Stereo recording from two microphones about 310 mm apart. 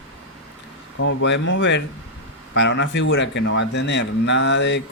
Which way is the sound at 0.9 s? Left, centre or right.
Left.